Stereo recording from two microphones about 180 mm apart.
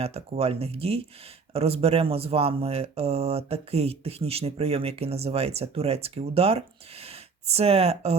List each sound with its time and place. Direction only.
0.0 s speech: 35° right (ahead or behind)